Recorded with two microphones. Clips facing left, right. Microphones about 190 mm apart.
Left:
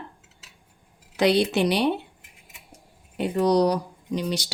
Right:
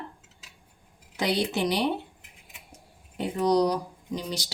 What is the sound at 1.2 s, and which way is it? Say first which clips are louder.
Speech: left 6 dB; 70° left (ahead or behind).